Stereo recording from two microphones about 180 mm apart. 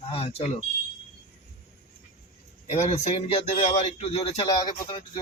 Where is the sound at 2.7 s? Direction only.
40° left (ahead or behind).